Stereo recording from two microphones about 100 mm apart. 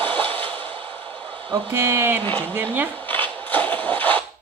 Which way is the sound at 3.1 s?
20° left (ahead or behind).